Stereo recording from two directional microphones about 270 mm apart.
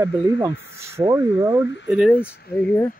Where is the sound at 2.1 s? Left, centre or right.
Left.